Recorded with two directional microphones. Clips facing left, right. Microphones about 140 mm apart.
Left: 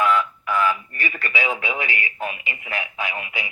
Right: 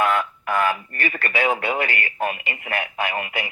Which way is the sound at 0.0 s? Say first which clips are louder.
Left 1 dB; 55° right (ahead or behind).